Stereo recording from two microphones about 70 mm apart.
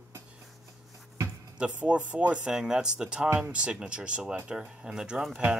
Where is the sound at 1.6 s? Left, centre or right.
Centre.